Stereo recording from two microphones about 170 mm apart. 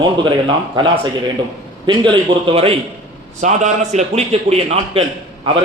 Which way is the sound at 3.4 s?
45° right (ahead or behind).